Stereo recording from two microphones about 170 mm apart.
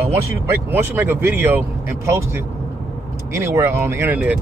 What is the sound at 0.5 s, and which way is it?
Speech, 10° right (ahead or behind).